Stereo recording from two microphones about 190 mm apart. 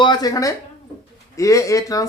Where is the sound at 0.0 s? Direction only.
20° left (ahead or behind).